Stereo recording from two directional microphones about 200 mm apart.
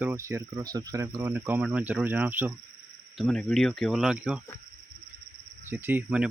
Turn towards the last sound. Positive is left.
turn(degrees=-5)  # may be behind; listen again after turning